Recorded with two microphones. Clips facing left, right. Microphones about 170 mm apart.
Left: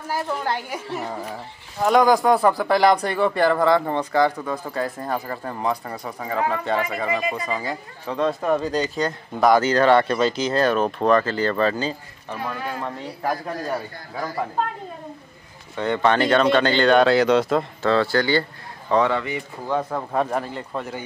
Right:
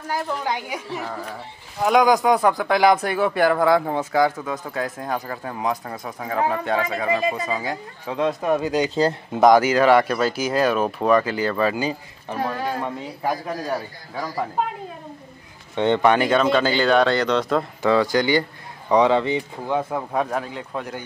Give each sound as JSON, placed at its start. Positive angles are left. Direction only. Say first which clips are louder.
{"t": 0.1, "sound": "speech", "louder": "even", "side_deg": 0}
{"t": 8.9, "sound": "speech", "louder": "right 4 dB", "side_deg": -25}
{"t": 9.5, "sound": "speech", "louder": "right 1 dB", "side_deg": -10}
{"t": 12.8, "sound": "speech", "louder": "right 1 dB", "side_deg": 0}
{"t": 15.7, "sound": "speech", "louder": "right 4 dB", "side_deg": -25}
{"t": 16.0, "sound": "speech", "louder": "left 2 dB", "side_deg": -10}
{"t": 17.8, "sound": "speech", "louder": "right 2 dB", "side_deg": -15}
{"t": 19.1, "sound": "speech", "louder": "right 5 dB", "side_deg": -30}
{"t": 19.7, "sound": "speech", "louder": "even", "side_deg": -5}